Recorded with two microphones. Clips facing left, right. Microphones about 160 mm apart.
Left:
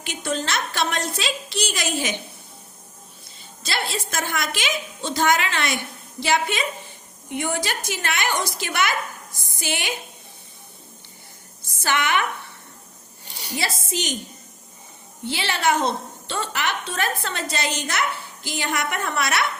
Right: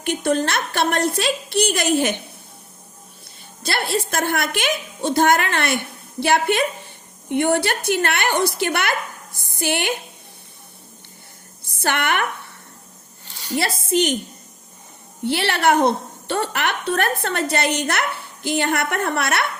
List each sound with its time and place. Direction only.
0.0 s a woman's voice: 55° right (ahead or behind)
3.6 s a woman's voice: 55° right (ahead or behind)
11.6 s a woman's voice: 60° right (ahead or behind)
13.3 s a sound: 15° left (ahead or behind)
13.6 s a woman's voice: 60° right (ahead or behind)
15.2 s a woman's voice: 60° right (ahead or behind)